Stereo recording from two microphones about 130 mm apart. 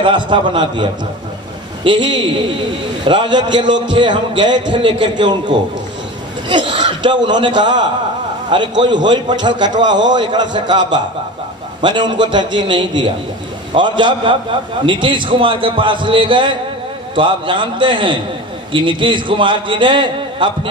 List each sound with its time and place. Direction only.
0.0 s a man's voice: 40° right (ahead or behind)
1.9 s a man's voice: 35° right (ahead or behind)